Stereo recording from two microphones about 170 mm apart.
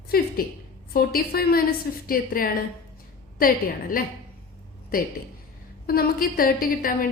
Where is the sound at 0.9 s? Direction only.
60° left (ahead or behind).